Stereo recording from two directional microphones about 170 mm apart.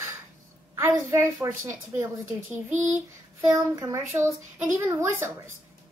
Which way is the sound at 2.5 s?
15° right (ahead or behind).